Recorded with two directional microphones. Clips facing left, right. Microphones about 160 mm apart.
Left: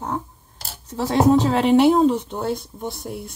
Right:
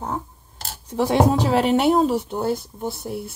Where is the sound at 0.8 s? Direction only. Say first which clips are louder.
Left 1 dB; 15° right (ahead or behind).